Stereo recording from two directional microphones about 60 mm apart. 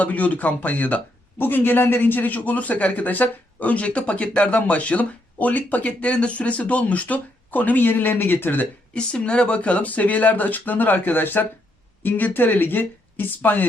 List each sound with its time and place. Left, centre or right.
0.0 s speech: left
9.0 s speech: centre